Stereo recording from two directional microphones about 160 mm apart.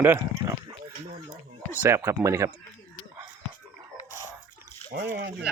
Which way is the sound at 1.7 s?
10° right (ahead or behind).